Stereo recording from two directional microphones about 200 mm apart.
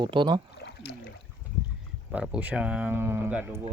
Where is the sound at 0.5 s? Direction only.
55° left (ahead or behind).